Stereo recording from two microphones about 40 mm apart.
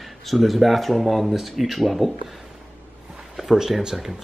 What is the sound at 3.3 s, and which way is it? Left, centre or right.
Speech, centre.